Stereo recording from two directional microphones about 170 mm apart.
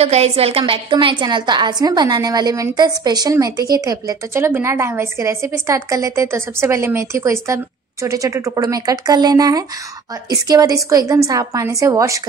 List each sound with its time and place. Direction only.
0.0 s a woman's voice: 35° right (ahead or behind); by 12.2 s 20° right (ahead or behind)